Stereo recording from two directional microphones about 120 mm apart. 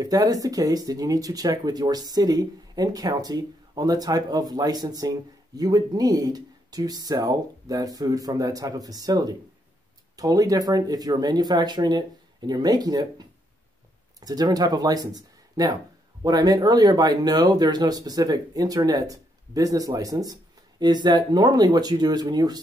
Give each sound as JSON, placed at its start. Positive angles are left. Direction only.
{"t": 0.0, "sound": "speech", "side_deg": -30}